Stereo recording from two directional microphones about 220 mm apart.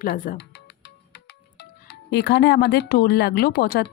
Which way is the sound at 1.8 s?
50° left (ahead or behind).